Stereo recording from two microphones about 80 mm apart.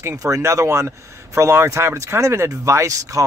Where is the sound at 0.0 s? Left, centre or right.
Right.